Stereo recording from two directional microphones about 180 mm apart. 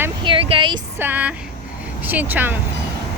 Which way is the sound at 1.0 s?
10° right (ahead or behind).